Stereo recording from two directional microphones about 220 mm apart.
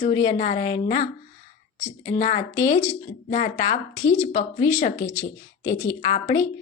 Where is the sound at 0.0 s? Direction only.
20° left (ahead or behind).